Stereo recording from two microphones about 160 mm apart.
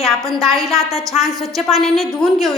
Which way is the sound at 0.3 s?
20° right (ahead or behind).